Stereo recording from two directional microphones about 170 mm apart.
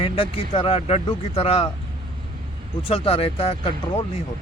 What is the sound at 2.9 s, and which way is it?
Speech, 35° left (ahead or behind).